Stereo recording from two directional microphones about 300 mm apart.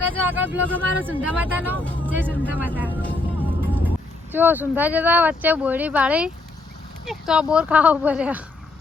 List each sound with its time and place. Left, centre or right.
0.3 s speech: centre
1.7 s speech: centre
2.5 s speech: centre
3.0 s music: centre
3.8 s speech: centre